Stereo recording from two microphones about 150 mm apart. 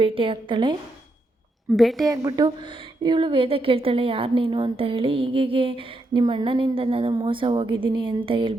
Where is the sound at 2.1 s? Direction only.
25° right (ahead or behind).